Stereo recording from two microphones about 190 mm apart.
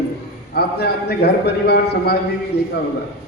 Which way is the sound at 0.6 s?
55° left (ahead or behind).